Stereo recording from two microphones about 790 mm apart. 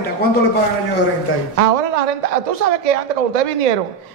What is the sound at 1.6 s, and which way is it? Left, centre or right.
A woman's voice, right.